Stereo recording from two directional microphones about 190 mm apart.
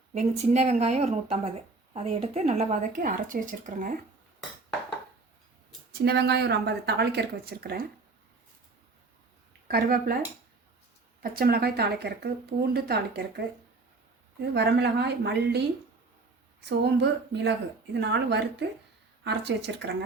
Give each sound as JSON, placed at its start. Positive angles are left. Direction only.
{"t": 0.1, "sound": "speech", "side_deg": -35}
{"t": 5.9, "sound": "speech", "side_deg": -55}
{"t": 9.6, "sound": "speech", "side_deg": -55}
{"t": 11.2, "sound": "speech", "side_deg": -55}
{"t": 14.4, "sound": "speech", "side_deg": -60}